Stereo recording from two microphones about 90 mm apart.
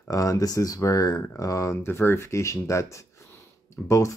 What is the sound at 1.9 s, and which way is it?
Speech, 25° left (ahead or behind).